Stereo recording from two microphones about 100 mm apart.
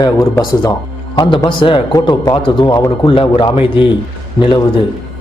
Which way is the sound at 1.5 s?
60° left (ahead or behind).